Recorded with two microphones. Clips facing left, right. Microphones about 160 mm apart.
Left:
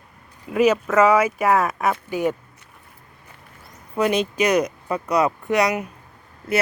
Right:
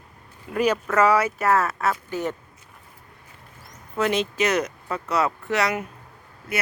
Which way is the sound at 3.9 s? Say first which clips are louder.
Left 3 dB; 15° left (ahead or behind).